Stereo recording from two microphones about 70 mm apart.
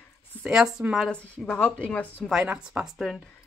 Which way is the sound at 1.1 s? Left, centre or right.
Centre.